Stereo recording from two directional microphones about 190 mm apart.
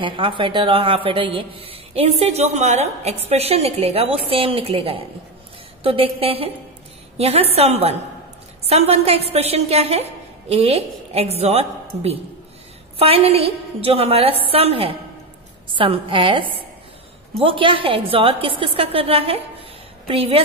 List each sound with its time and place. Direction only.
0.0 s a woman's voice: 25° right (ahead or behind)